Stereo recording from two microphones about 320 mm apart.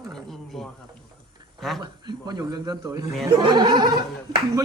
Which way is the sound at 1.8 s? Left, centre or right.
Centre.